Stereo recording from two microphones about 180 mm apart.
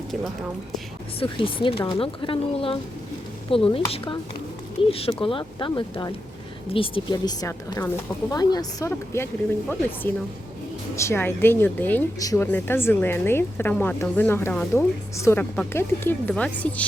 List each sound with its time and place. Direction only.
1.2 s speech: 30° left (ahead or behind); by 16.8 s 5° left (ahead or behind)